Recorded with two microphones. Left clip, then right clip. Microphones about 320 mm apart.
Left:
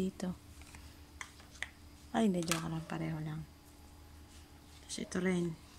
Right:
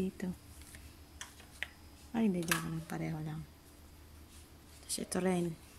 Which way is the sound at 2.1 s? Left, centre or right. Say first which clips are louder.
Left 2 dB; left.